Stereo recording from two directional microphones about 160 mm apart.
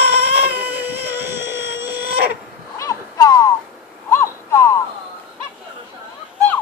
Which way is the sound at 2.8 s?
20° left (ahead or behind).